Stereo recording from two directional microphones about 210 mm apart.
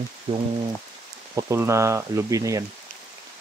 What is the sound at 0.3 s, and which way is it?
Speech, 20° right (ahead or behind).